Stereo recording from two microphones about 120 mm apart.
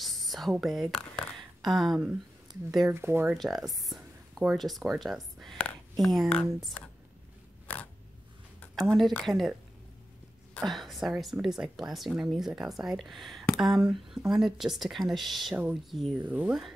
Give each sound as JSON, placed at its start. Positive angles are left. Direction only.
{"t": 0.0, "sound": "speech", "side_deg": 0}
{"t": 2.5, "sound": "a sound", "side_deg": -40}
{"t": 2.9, "sound": "speech", "side_deg": -20}
{"t": 3.3, "sound": "speech", "side_deg": 0}
{"t": 8.9, "sound": "speech", "side_deg": 5}